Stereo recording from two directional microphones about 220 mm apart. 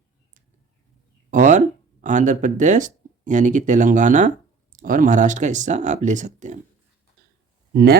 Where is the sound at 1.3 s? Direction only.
35° right (ahead or behind).